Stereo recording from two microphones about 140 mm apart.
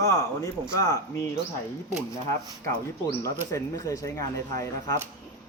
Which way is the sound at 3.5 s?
20° left (ahead or behind).